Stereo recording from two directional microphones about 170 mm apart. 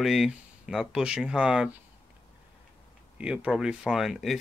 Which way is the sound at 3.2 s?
5° right (ahead or behind).